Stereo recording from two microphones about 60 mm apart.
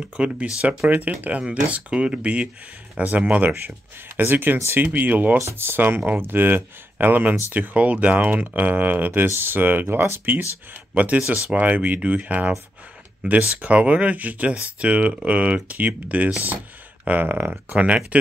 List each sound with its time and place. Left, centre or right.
0.0 s speech: centre; by 10.4 s right
10.7 s speech: right